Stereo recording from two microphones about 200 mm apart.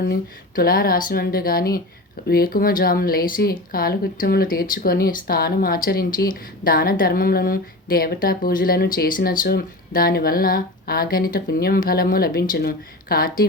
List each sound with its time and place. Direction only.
0.1 s speech: 45° left (ahead or behind)